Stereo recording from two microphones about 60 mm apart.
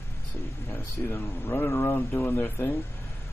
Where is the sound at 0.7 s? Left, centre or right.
Left.